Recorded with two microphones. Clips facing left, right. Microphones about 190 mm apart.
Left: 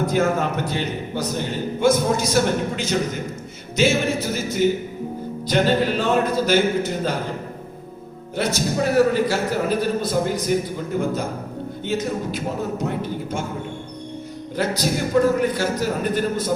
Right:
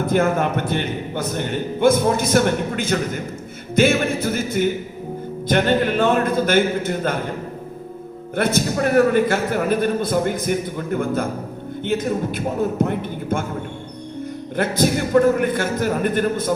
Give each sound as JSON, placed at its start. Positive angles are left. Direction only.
{"t": 0.0, "sound": "a man's voice", "side_deg": -55}
{"t": 8.4, "sound": "a man's voice", "side_deg": -55}
{"t": 11.9, "sound": "a man's voice", "side_deg": -55}
{"t": 14.5, "sound": "a man's voice", "side_deg": -55}